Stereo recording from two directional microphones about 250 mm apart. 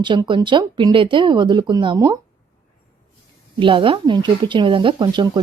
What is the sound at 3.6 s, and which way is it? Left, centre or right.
A woman's voice, centre.